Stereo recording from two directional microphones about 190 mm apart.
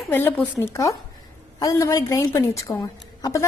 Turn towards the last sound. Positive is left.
turn(degrees=15)  # may be behind; listen again after turning